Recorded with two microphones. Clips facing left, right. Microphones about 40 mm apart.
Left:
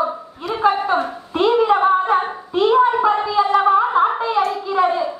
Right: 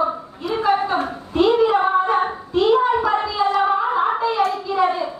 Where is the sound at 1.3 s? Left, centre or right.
Centre.